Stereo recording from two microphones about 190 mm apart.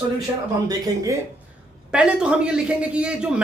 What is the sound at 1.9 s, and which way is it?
Speech, 5° right (ahead or behind).